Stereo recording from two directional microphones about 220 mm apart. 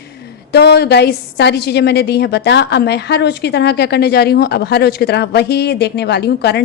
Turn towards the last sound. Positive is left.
turn(degrees=50)  # may be behind; listen again after turning